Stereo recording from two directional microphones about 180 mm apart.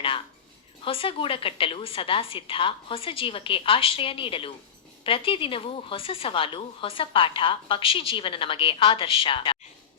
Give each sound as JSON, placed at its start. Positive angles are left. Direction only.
{"t": 0.9, "sound": "a woman's voice", "side_deg": 30}